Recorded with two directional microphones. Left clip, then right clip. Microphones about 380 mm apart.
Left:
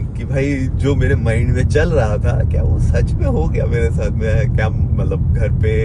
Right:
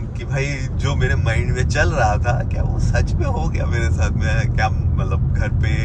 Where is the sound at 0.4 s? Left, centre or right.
Centre.